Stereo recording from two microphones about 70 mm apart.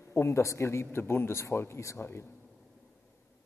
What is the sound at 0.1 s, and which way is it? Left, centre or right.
A man's voice, left.